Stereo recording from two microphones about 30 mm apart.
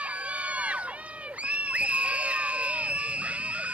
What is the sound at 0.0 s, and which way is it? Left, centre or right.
Crowd, right.